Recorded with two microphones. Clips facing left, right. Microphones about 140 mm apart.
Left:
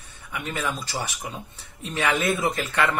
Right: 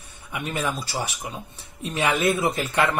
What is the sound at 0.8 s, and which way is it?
Speech, 10° right (ahead or behind).